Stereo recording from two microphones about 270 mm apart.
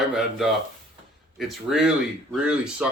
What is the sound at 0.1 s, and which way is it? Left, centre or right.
Speech, centre.